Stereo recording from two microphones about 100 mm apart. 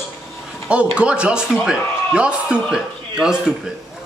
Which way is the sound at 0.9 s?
10° right (ahead or behind).